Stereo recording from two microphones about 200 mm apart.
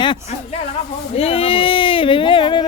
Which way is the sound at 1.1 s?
30° left (ahead or behind).